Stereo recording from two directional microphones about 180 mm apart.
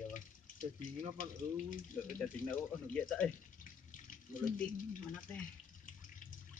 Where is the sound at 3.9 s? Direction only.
50° left (ahead or behind).